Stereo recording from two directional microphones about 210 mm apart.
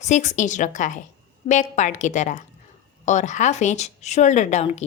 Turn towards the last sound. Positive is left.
turn(degrees=35)  # may be behind; listen again after turning